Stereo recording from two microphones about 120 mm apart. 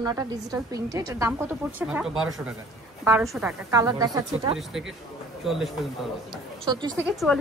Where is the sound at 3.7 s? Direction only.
30° right (ahead or behind).